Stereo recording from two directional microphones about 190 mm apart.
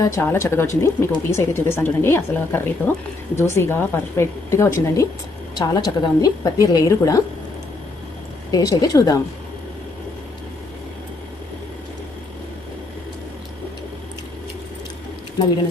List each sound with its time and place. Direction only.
0.0 s a woman's voice: 15° left (ahead or behind)
8.4 s a woman's voice: 20° left (ahead or behind)